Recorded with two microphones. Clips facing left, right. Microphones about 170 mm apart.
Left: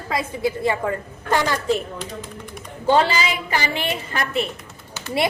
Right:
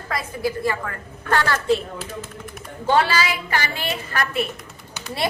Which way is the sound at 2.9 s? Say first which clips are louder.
Left 1 dB; 20° left (ahead or behind).